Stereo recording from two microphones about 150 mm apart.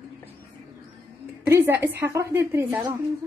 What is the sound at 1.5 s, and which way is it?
A woman's voice, 15° right (ahead or behind).